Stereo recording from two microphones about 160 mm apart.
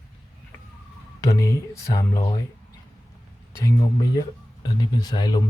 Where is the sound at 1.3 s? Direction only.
20° left (ahead or behind).